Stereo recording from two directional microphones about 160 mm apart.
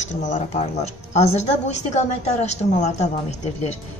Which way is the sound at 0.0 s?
50° left (ahead or behind).